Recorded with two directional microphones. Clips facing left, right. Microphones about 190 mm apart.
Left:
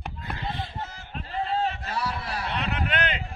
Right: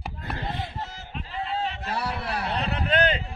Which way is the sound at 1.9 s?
60° right (ahead or behind).